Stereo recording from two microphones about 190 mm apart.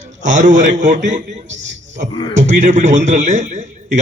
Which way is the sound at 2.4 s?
40° right (ahead or behind).